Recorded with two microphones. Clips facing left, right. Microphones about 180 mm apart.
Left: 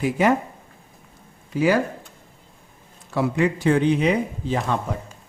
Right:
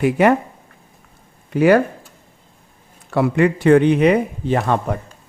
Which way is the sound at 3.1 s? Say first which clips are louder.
Right 5 dB; 60° right (ahead or behind).